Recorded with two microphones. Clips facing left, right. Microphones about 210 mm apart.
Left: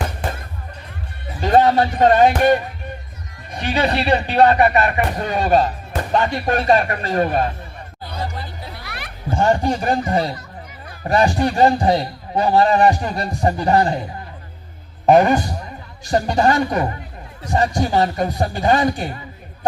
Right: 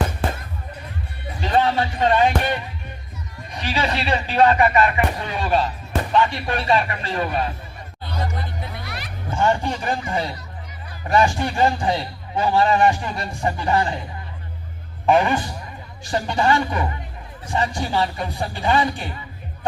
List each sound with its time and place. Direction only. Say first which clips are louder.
1.4 s a man's voice: left 5 dB; 45° left (ahead or behind); by 4.5 s 60° left (ahead or behind)
4.5 s speech: left 2 dB; 40° left (ahead or behind)
8.9 s a sound: right 1 dB; 60° left (ahead or behind)
9.3 s a man's voice: left 4 dB; 35° left (ahead or behind)
15.0 s a man's voice: left 5 dB; 40° left (ahead or behind)